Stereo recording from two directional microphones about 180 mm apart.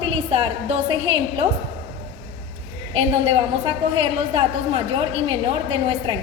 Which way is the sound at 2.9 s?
35° right (ahead or behind).